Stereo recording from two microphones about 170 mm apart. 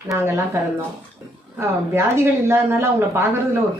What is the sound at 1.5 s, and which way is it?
Speech, 15° right (ahead or behind).